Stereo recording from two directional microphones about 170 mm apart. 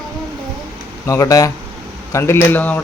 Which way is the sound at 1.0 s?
20° left (ahead or behind).